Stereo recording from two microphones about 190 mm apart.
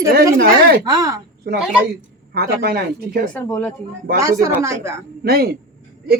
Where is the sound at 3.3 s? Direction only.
5° left (ahead or behind).